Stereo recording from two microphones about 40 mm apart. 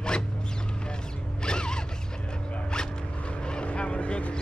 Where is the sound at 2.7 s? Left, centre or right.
Left.